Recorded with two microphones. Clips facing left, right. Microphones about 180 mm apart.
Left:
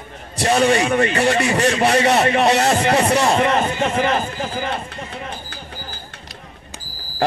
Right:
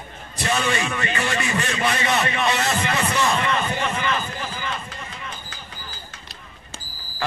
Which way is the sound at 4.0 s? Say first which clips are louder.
Left 6 dB; 55° left (ahead or behind).